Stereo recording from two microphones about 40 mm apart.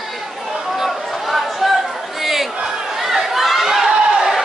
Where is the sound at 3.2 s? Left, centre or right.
Centre.